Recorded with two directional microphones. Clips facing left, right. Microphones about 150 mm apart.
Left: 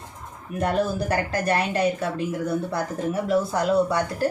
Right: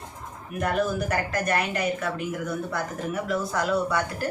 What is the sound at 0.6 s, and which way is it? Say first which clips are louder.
Speech: left 2 dB; 30° left (ahead or behind).